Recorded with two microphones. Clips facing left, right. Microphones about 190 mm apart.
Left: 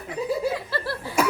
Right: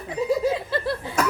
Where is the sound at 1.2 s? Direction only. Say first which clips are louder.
Left 2 dB; 10° left (ahead or behind).